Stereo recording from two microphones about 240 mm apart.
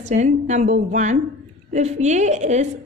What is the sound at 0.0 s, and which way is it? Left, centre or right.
A woman's voice, right.